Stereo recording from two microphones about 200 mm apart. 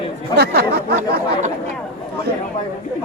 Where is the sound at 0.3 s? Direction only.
55° right (ahead or behind).